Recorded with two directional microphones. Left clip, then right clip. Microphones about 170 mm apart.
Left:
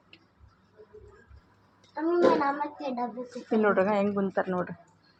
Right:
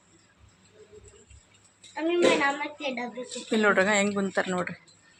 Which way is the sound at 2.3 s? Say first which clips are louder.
Right 1 dB; 5° right (ahead or behind).